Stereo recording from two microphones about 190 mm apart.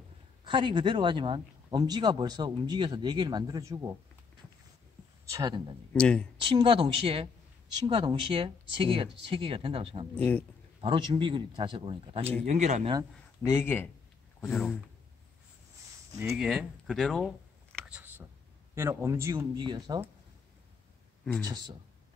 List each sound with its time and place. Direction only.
0.5 s speech: 25° right (ahead or behind)
5.3 s speech: 20° right (ahead or behind)
5.9 s speech: 5° left (ahead or behind)
6.4 s speech: 25° right (ahead or behind)
10.1 s speech: 10° left (ahead or behind)
10.8 s speech: 25° right (ahead or behind)
13.4 s speech: 15° left (ahead or behind)
14.4 s speech: centre (ahead or behind)
16.1 s speech: 15° right (ahead or behind)
16.3 s speech: centre (ahead or behind)
17.7 s a sound: 5° right (ahead or behind)
18.8 s speech: 15° right (ahead or behind)
21.4 s speech: 20° right (ahead or behind)